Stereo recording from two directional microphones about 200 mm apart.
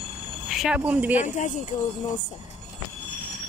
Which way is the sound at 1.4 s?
35° left (ahead or behind).